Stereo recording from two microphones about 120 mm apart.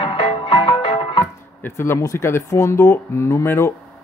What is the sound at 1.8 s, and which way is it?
Speech, 20° left (ahead or behind).